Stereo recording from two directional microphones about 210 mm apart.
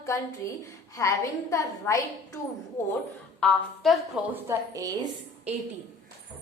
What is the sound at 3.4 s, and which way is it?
A woman's voice, centre (ahead or behind).